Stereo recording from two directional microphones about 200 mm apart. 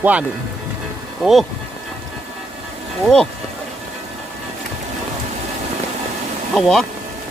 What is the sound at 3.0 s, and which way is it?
Speech, 5° left (ahead or behind).